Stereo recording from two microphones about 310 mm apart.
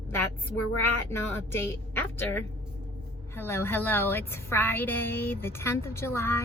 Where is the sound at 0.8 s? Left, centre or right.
Centre.